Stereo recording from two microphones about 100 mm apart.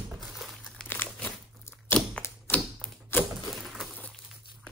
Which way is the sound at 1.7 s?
25° left (ahead or behind).